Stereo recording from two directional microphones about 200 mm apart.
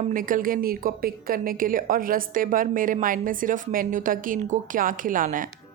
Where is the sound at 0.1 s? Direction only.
45° right (ahead or behind).